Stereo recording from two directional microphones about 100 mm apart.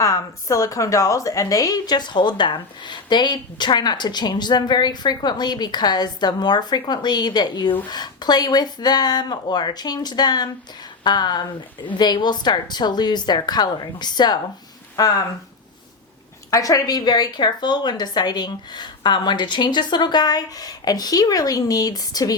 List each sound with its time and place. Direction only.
0.0 s a woman's voice: 35° left (ahead or behind)
16.5 s a woman's voice: 35° left (ahead or behind)